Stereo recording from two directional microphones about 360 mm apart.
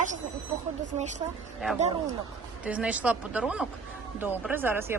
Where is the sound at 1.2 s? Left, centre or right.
Centre.